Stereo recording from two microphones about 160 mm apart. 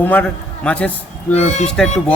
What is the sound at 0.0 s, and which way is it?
A man's voice, 10° left (ahead or behind).